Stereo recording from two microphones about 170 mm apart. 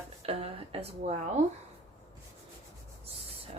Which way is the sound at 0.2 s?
35° right (ahead or behind).